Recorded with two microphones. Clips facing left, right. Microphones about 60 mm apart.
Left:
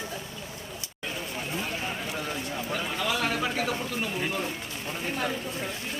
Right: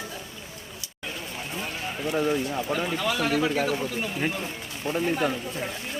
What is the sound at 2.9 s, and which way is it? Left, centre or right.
Speech, centre.